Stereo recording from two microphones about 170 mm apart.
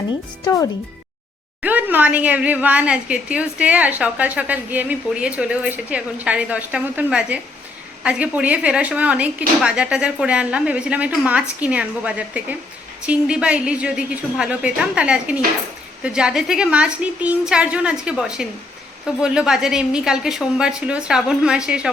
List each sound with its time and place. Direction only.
0.1 s speech: 20° left (ahead or behind)
1.6 s a woman's voice: 10° right (ahead or behind)